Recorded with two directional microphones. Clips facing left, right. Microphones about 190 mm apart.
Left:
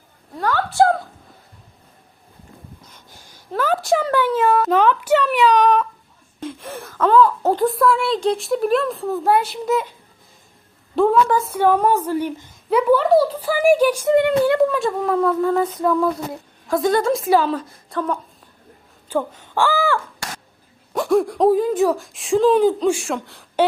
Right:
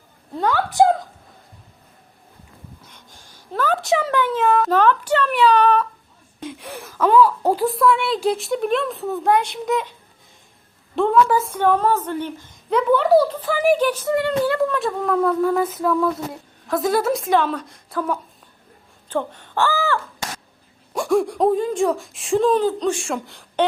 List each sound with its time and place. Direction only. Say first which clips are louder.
0.4 s a sound: even; 15° right (ahead or behind)
2.9 s a sound: left 1 dB; 5° left (ahead or behind)
4.1 s speech: left 1 dB; 10° left (ahead or behind)
6.4 s a sound: left 2 dB; centre (ahead or behind)
6.9 s a woman's voice: even; 10° right (ahead or behind)
10.9 s a woman's voice: left 1 dB; centre (ahead or behind); by 14.7 s 15° left (ahead or behind)
14.7 s a woman's voice: left 2 dB; 5° left (ahead or behind)
19.0 s speech: left 2 dB; 10° left (ahead or behind)
20.9 s speech: left 1 dB; centre (ahead or behind)